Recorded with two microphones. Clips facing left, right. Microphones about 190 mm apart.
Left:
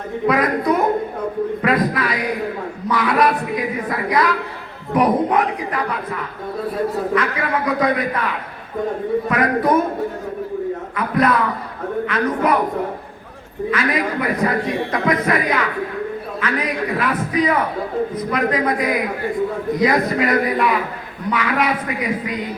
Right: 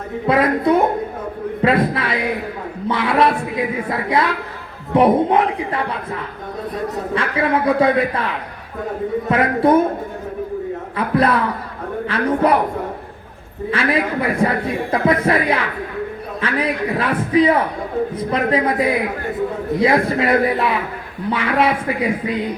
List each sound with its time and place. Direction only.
0.3 s a man's voice: 30° right (ahead or behind)
7.1 s a man's voice: 30° right (ahead or behind)
9.3 s a man's voice: 30° right (ahead or behind)
10.9 s a man's voice: 30° right (ahead or behind)
13.7 s a man's voice: 30° right (ahead or behind)